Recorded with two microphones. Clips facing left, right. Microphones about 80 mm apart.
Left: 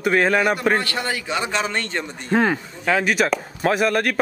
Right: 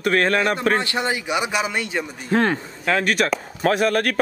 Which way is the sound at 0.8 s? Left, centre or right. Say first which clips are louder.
Right 2 dB; right.